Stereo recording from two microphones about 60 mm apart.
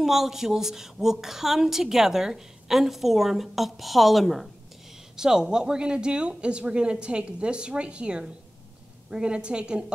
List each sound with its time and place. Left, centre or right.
0.0 s a woman's voice: centre